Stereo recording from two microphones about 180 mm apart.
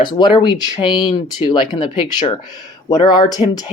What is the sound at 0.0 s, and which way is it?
Speech, 25° left (ahead or behind).